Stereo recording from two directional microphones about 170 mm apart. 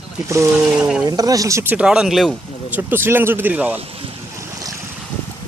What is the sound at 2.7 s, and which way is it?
Speech, 10° right (ahead or behind).